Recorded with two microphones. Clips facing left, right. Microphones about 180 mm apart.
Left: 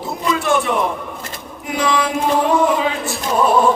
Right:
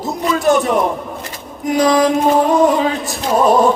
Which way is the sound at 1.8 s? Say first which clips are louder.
Right 6 dB; 40° right (ahead or behind).